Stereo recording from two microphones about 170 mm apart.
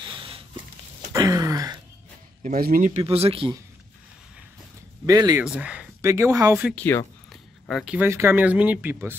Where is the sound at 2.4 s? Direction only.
55° right (ahead or behind); by 3.5 s 35° right (ahead or behind).